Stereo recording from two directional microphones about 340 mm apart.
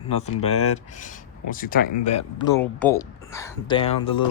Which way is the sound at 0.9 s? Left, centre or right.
Left.